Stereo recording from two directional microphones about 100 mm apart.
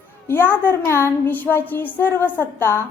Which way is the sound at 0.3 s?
20° left (ahead or behind).